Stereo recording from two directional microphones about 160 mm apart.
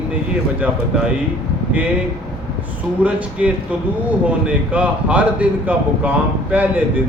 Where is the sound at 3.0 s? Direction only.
10° right (ahead or behind).